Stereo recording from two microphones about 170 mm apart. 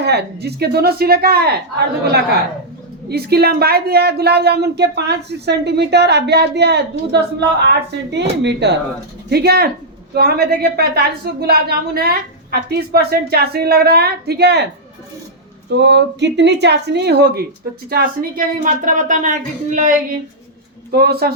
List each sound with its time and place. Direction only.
0.0 s a woman's voice: 75° right (ahead or behind)
3.1 s a woman's voice: 70° right (ahead or behind); by 8.7 s 90° right
9.3 s a woman's voice: 70° right (ahead or behind)
15.7 s a woman's voice: 90° right; by 17.4 s 75° right (ahead or behind)
17.8 s speech: 60° right (ahead or behind)
20.9 s a woman's voice: 65° right (ahead or behind)